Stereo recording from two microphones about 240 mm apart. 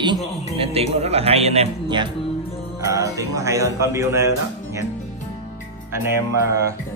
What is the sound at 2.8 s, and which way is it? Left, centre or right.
Music, centre.